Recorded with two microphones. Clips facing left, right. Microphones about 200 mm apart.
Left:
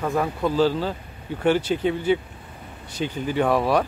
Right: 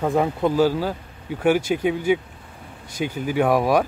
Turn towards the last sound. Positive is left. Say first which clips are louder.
# right 2 dB
turn(degrees=-10)  # may be behind; listen again after turning